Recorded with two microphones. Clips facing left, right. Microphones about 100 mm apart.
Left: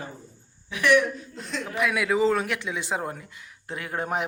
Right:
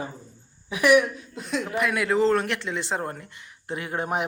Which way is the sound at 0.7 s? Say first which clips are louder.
Right 2 dB; 15° right (ahead or behind).